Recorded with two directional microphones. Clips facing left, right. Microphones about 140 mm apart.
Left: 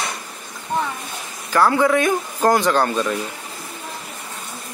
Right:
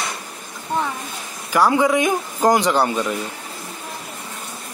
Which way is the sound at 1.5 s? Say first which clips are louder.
Even; 15° right (ahead or behind).